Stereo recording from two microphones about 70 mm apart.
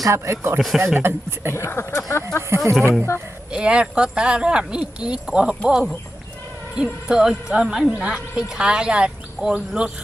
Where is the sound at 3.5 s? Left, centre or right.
Centre.